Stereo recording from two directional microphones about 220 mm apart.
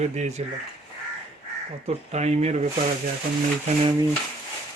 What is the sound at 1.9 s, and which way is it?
Speech, 30° right (ahead or behind).